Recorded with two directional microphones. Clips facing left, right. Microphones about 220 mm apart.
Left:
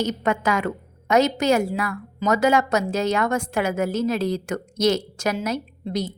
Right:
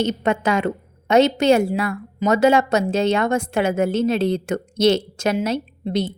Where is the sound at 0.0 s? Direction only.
25° right (ahead or behind).